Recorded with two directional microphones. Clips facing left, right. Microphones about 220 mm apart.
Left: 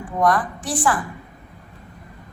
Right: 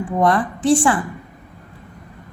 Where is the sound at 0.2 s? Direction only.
25° right (ahead or behind).